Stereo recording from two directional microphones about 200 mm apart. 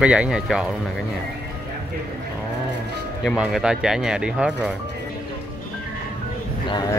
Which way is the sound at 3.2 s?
5° right (ahead or behind).